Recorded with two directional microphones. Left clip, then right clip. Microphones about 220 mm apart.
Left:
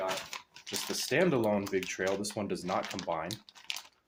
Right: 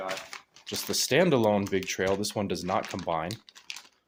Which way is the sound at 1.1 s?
45° right (ahead or behind).